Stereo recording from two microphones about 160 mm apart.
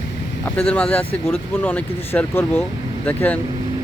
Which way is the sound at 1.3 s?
15° left (ahead or behind).